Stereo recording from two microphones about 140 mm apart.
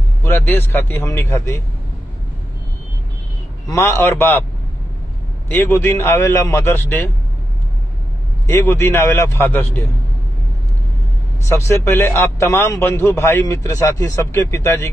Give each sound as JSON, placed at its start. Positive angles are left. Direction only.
{"t": 0.2, "sound": "a man's voice", "side_deg": 15}
{"t": 3.6, "sound": "a man's voice", "side_deg": 20}
{"t": 5.5, "sound": "a man's voice", "side_deg": 15}
{"t": 8.5, "sound": "a man's voice", "side_deg": 15}
{"t": 11.4, "sound": "a man's voice", "side_deg": 20}